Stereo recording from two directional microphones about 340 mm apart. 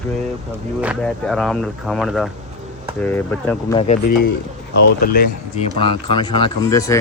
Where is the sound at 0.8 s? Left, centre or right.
Centre.